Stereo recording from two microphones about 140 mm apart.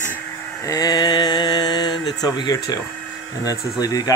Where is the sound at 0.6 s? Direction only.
25° left (ahead or behind).